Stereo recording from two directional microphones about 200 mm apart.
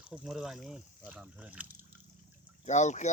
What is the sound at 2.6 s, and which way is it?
Speech, 35° left (ahead or behind).